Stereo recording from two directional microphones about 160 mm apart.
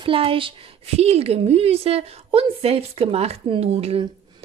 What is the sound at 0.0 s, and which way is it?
Speech, 35° right (ahead or behind).